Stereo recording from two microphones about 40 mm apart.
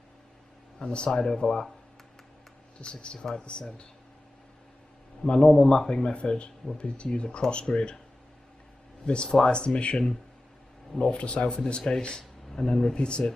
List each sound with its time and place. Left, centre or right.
0.7 s speech: left
2.8 s speech: left
5.2 s speech: centre
9.0 s speech: left
12.9 s speech: left